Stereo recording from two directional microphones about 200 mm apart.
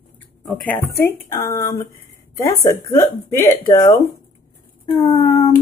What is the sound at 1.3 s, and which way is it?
Speech, 15° left (ahead or behind).